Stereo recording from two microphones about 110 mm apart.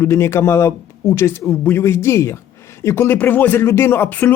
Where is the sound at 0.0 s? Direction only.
25° left (ahead or behind).